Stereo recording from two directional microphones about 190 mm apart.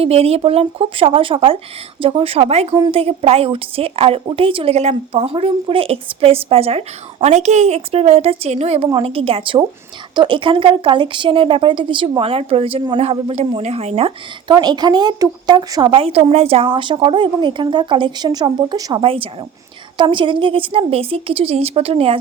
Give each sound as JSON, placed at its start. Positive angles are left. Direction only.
{"t": 0.0, "sound": "a woman's voice", "side_deg": -30}